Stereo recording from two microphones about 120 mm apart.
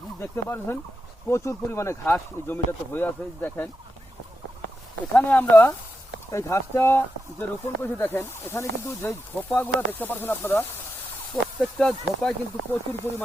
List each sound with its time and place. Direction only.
0.2 s speech: 20° left (ahead or behind)
5.1 s speech: 15° left (ahead or behind)
11.6 s speech: 5° left (ahead or behind)
12.7 s speech: 15° left (ahead or behind)